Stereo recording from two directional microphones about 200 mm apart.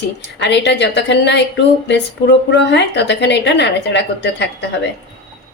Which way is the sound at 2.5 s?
60° left (ahead or behind).